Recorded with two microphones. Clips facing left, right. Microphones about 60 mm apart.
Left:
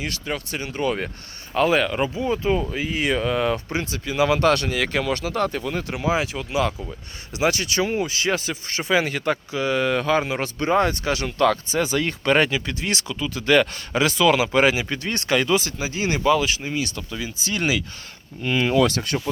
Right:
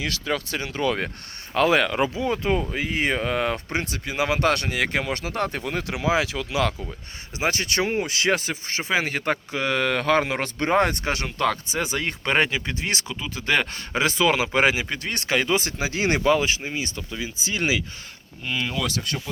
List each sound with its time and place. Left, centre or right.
0.1 s speech: right
1.5 s speech: right
5.9 s speech: right
6.5 s speech: right
7.3 s speech: right
7.8 s speech: right
8.6 s speech: centre
9.1 s speech: right
11.3 s speech: centre
14.8 s speech: centre
15.8 s speech: right
16.6 s speech: right
19.0 s speech: left